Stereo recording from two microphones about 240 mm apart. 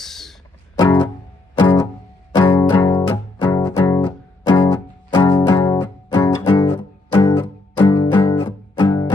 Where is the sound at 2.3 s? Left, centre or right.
Centre.